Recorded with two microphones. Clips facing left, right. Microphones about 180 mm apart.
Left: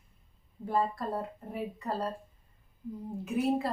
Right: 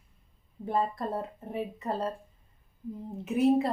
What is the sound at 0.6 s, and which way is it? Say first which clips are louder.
Speech: right 1 dB; 20° right (ahead or behind).